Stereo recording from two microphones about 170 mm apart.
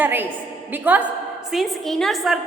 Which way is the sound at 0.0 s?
10° right (ahead or behind).